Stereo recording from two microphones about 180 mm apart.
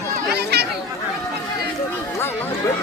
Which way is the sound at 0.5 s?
65° right (ahead or behind).